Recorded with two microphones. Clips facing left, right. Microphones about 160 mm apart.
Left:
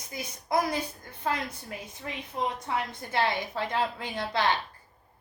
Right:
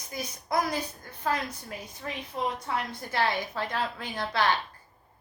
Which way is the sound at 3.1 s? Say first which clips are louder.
Even; 20° left (ahead or behind).